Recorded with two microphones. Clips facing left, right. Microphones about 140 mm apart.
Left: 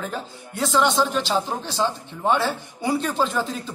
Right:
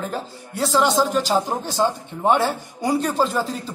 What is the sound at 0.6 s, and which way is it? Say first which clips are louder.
Speech: right 2 dB; 35° right (ahead or behind).